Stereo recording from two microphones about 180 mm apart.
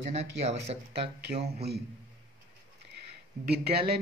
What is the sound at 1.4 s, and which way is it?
Speech, 65° right (ahead or behind).